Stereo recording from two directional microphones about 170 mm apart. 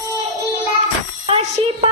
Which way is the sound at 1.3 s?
35° right (ahead or behind).